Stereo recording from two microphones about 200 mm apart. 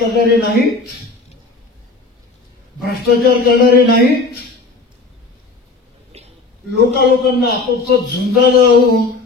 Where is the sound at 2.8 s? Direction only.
50° left (ahead or behind).